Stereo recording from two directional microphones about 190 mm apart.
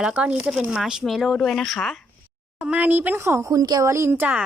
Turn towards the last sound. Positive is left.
turn(degrees=-10)  # may be behind; listen again after turning